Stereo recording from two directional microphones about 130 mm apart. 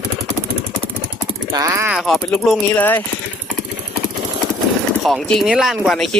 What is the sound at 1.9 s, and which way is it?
Speech, 5° right (ahead or behind).